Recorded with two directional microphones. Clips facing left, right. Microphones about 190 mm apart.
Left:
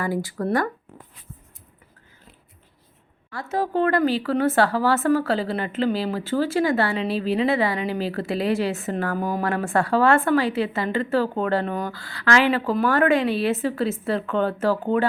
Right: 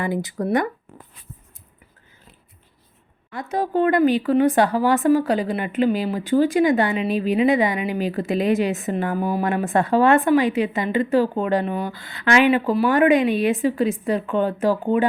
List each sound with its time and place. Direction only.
0.0 s speech: 20° right (ahead or behind)
3.3 s speech: 15° right (ahead or behind)
11.9 s speech: 20° right (ahead or behind)